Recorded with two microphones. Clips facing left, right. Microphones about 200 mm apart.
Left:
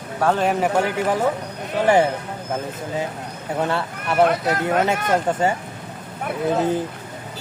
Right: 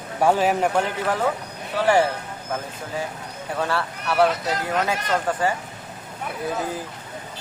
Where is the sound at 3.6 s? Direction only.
20° left (ahead or behind).